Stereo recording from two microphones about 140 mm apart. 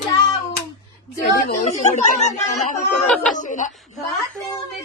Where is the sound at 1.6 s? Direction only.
55° left (ahead or behind).